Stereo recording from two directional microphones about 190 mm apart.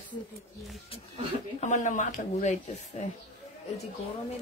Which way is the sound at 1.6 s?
40° left (ahead or behind).